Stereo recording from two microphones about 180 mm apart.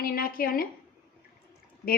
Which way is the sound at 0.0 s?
55° left (ahead or behind).